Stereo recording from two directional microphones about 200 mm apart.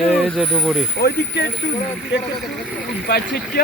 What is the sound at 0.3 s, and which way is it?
Speech, centre (ahead or behind).